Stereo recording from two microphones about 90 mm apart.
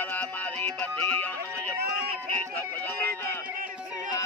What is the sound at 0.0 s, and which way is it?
Music, 20° left (ahead or behind).